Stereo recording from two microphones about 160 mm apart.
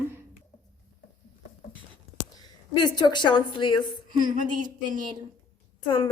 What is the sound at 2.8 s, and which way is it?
A woman's voice, 25° left (ahead or behind).